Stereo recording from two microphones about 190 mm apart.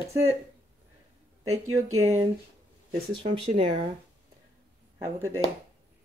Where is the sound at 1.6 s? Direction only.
15° right (ahead or behind).